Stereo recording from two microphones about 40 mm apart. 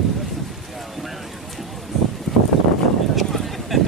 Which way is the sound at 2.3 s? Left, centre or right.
Centre.